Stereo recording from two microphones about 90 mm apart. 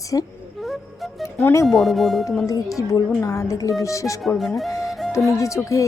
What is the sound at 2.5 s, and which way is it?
A woman's voice, 40° left (ahead or behind).